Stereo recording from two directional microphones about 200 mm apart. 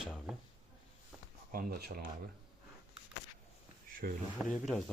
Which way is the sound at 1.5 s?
45° right (ahead or behind).